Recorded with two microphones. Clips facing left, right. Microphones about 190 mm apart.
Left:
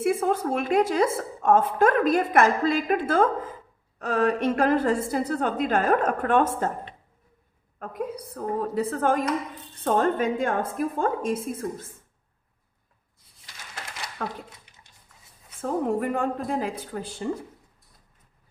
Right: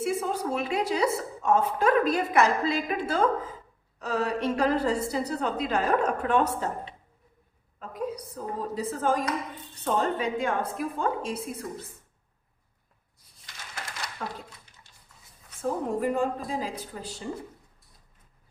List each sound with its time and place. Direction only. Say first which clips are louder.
0.0 s a woman's voice: left 5 dB; 55° left (ahead or behind)
14.2 s speech: left 4 dB; 55° left (ahead or behind)
14.8 s a sound: left 1 dB; 15° left (ahead or behind)
16.0 s speech: even; 60° left (ahead or behind)